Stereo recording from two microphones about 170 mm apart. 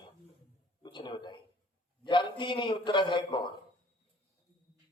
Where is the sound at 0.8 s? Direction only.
25° left (ahead or behind).